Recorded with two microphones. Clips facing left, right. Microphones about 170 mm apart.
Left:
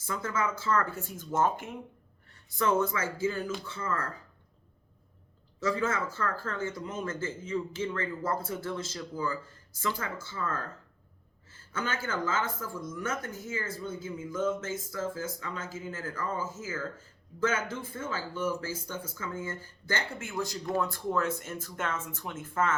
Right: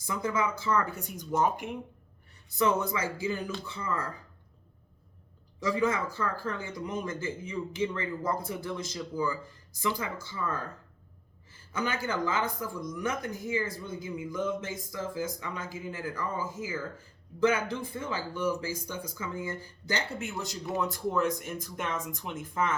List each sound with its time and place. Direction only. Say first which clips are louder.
0.0 s speech: right 2 dB; 15° right (ahead or behind)
5.5 s speech: right 2 dB; 15° right (ahead or behind)